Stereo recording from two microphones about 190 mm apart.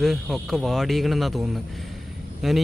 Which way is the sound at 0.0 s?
Centre (ahead or behind).